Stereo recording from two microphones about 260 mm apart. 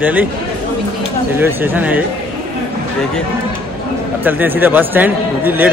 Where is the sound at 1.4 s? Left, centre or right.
Centre.